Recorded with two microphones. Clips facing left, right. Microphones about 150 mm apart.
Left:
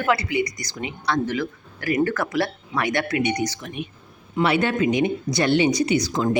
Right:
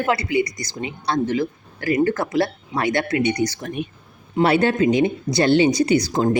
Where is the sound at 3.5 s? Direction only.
45° right (ahead or behind).